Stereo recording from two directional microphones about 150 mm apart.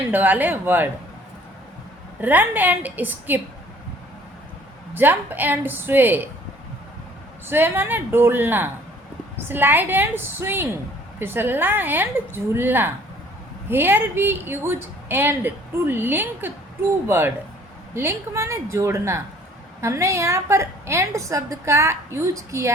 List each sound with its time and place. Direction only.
0.1 s a woman's voice: 10° right (ahead or behind)
2.2 s a woman's voice: 10° right (ahead or behind)
4.9 s a woman's voice: 10° right (ahead or behind)
7.4 s a woman's voice: 15° right (ahead or behind)